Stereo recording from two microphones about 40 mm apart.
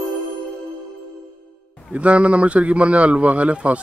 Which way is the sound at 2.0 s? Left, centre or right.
Right.